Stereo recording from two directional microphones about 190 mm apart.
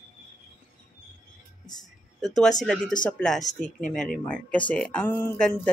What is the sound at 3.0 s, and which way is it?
Speech, 5° left (ahead or behind).